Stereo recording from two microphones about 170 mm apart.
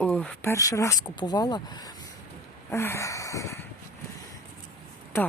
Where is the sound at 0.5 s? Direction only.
20° left (ahead or behind).